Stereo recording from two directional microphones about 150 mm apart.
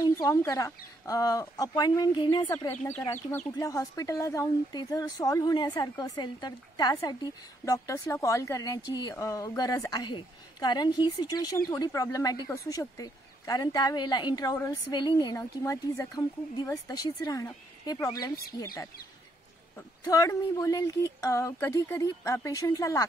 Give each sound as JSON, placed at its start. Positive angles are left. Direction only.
{"t": 0.0, "sound": "speech", "side_deg": 25}
{"t": 20.1, "sound": "speech", "side_deg": 25}